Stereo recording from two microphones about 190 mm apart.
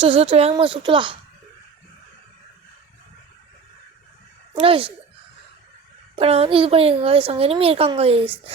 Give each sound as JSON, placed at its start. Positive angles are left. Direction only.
{"t": 0.0, "sound": "speech", "side_deg": -30}
{"t": 4.5, "sound": "speech", "side_deg": -30}
{"t": 6.1, "sound": "speech", "side_deg": -30}